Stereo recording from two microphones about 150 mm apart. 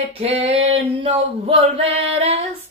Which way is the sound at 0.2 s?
40° right (ahead or behind).